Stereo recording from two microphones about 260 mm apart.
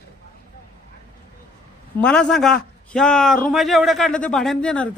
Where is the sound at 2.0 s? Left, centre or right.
Centre.